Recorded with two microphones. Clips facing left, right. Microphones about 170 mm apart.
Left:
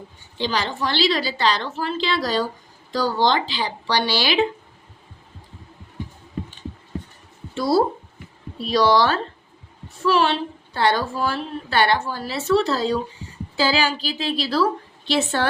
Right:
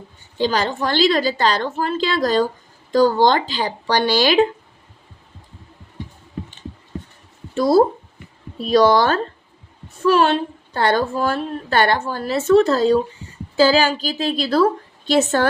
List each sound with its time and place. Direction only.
0.3 s a woman's voice: 45° right (ahead or behind)
7.5 s a woman's voice: 50° right (ahead or behind)